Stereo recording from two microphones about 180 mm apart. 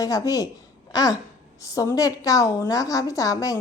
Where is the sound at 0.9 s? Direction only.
20° left (ahead or behind).